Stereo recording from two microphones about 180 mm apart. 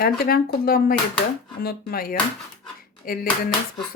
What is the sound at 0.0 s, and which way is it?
Speech, 55° left (ahead or behind).